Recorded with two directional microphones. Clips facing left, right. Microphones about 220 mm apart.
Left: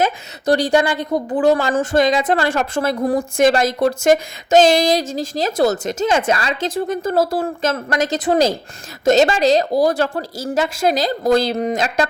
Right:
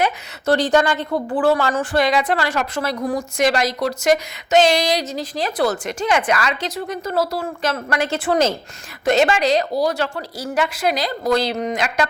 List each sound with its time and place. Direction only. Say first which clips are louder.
0.4 s speech: left 1 dB; 10° left (ahead or behind)
1.8 s a woman's voice: left 3 dB; 45° left (ahead or behind)
2.0 s a woman's voice: left 2 dB; 20° left (ahead or behind)
2.3 s a woman's voice: left 3 dB; 50° left (ahead or behind)
6.1 s a woman's voice: left 1 dB; 25° left (ahead or behind)
6.8 s a woman's voice: left 3 dB; 45° left (ahead or behind)
11.5 s speech: left 3 dB; 35° left (ahead or behind)